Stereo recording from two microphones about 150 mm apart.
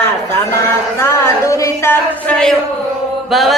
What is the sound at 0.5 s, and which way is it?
Music, 20° left (ahead or behind).